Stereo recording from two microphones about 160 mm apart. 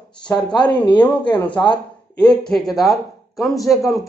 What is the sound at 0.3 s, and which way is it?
Speech, 25° left (ahead or behind).